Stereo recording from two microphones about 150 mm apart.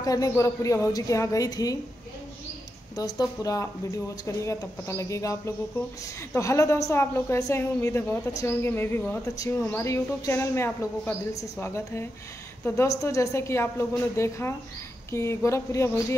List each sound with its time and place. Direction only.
0.0 s speech: 25° left (ahead or behind)
3.0 s speech: 25° left (ahead or behind)